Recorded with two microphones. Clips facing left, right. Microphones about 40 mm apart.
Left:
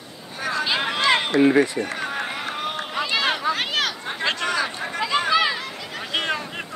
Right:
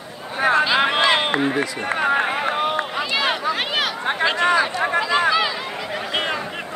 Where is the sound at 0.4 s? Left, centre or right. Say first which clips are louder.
Right 8 dB; right.